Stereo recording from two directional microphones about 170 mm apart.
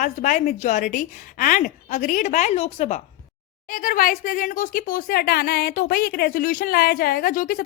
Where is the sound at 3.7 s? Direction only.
55° left (ahead or behind).